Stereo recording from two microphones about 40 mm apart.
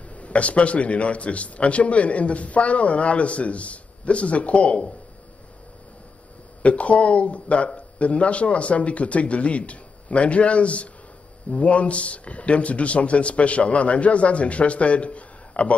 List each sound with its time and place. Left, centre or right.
0.1 s a man's voice: left
6.6 s a man's voice: left